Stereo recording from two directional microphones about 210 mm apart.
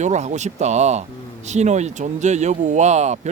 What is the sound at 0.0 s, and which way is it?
Speech, 35° right (ahead or behind).